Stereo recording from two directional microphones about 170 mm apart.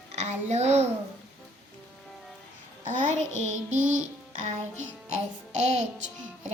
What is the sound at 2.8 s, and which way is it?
Music, 45° right (ahead or behind).